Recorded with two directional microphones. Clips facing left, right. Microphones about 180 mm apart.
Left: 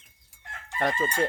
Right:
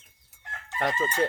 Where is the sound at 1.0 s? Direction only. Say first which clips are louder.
Even; 15° left (ahead or behind).